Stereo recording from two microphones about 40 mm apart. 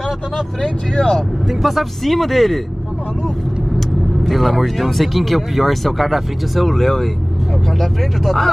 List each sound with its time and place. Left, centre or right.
0.6 s speech: left
1.5 s speech: centre
4.2 s speech: centre